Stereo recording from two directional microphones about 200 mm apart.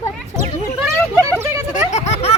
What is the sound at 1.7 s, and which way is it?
Speech, 35° left (ahead or behind).